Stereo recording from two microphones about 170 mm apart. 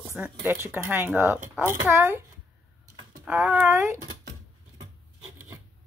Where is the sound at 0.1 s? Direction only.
10° right (ahead or behind).